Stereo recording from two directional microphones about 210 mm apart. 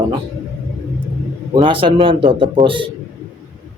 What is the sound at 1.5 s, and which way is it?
Speech, 25° right (ahead or behind).